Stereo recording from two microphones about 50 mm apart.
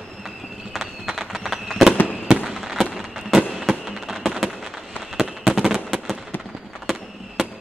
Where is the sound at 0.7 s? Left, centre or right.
Centre.